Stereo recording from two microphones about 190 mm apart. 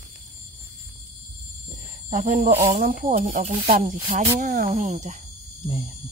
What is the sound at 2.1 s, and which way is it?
Speech, 40° right (ahead or behind).